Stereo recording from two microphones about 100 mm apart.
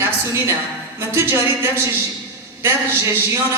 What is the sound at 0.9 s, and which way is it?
A woman's voice, 25° right (ahead or behind).